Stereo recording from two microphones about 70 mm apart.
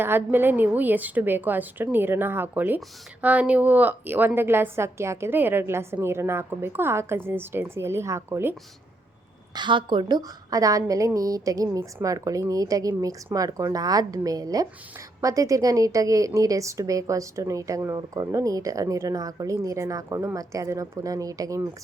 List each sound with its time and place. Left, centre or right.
0.0 s a woman's voice: right
9.6 s a woman's voice: right